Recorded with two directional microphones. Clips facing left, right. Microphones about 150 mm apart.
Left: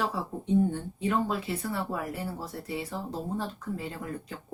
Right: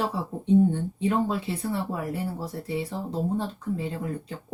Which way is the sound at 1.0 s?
30° right (ahead or behind).